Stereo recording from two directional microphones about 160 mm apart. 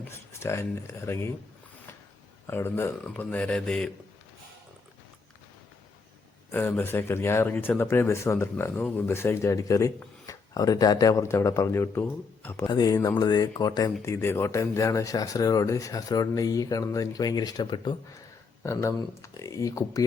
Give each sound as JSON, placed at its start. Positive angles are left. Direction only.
{"t": 0.0, "sound": "speech", "side_deg": 15}
{"t": 2.5, "sound": "speech", "side_deg": 15}
{"t": 6.5, "sound": "speech", "side_deg": 10}
{"t": 12.6, "sound": "speech", "side_deg": 25}
{"t": 18.6, "sound": "speech", "side_deg": 15}